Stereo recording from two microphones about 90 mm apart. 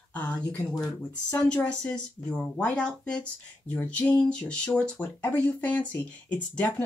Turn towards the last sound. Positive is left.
turn(degrees=15)  # may be behind; listen again after turning